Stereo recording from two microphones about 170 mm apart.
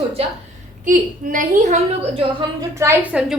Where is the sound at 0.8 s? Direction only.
50° right (ahead or behind); by 2.4 s 35° right (ahead or behind).